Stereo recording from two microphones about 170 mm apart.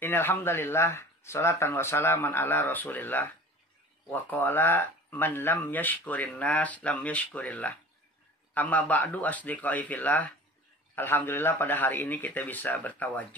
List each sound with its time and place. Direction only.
0.0 s speech: 15° left (ahead or behind)